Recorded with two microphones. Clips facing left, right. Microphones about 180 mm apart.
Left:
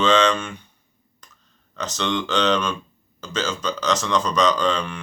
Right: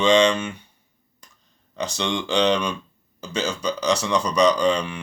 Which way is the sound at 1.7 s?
15° right (ahead or behind).